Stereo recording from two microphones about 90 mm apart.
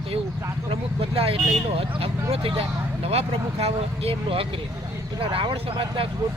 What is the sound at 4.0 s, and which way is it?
Speech, 90° right.